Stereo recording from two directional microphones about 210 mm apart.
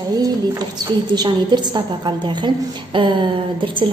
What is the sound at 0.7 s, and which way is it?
A woman's voice, 20° right (ahead or behind).